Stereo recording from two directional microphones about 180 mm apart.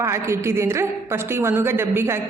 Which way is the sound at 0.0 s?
15° right (ahead or behind).